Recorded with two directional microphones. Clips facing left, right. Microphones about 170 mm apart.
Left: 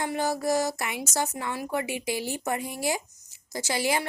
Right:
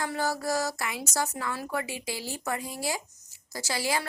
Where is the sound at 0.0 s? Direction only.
20° left (ahead or behind).